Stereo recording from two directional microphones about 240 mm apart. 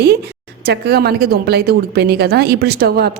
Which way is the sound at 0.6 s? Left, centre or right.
Right.